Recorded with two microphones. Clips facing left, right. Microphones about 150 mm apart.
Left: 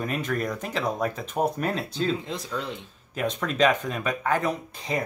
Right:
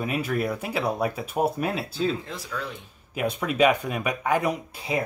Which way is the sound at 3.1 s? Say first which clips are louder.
Right 1 dB; 10° right (ahead or behind).